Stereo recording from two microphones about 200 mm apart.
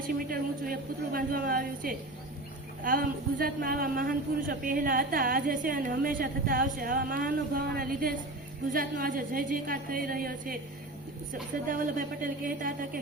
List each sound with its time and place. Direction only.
0.3 s a man's voice: 45° right (ahead or behind)
11.7 s a man's voice: 45° right (ahead or behind)